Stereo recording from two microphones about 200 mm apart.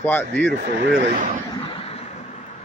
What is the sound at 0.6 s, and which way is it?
Speech, 60° right (ahead or behind).